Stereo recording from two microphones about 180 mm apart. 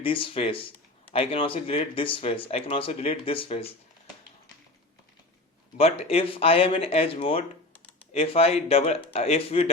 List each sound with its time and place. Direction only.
0.0 s speech: 30° left (ahead or behind)
5.7 s speech: 35° left (ahead or behind)